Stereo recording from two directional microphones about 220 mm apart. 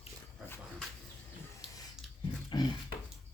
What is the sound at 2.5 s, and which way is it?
Dog, 20° left (ahead or behind).